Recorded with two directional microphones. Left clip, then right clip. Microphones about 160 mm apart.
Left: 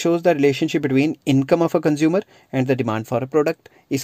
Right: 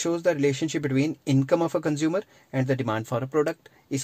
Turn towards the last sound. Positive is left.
turn(degrees=35)  # may be behind; listen again after turning